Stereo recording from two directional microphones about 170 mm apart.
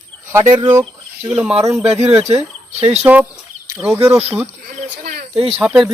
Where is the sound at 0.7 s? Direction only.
15° right (ahead or behind).